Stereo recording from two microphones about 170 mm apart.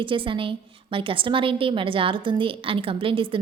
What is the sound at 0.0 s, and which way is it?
A woman's voice, 30° right (ahead or behind).